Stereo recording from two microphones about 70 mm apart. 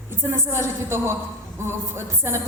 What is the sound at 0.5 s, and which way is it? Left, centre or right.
Speech, right.